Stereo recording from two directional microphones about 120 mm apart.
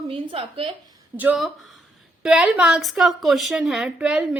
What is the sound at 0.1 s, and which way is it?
Speech, 45° right (ahead or behind).